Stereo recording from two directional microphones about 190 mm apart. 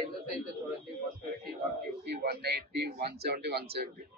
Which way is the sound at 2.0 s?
55° right (ahead or behind).